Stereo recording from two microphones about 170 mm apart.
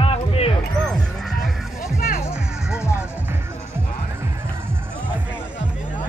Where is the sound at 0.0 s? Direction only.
35° left (ahead or behind).